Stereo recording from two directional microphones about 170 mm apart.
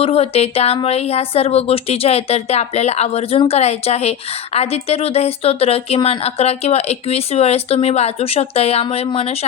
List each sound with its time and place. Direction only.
0.0 s speech: 35° left (ahead or behind)